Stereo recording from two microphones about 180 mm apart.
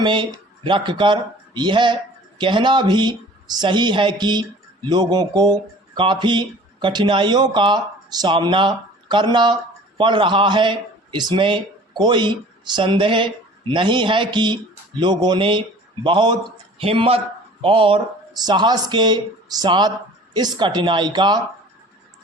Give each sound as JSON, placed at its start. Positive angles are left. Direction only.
{"t": 0.0, "sound": "a man's voice", "side_deg": -25}